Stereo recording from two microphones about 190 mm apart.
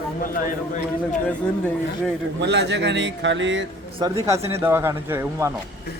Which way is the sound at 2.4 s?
65° right (ahead or behind).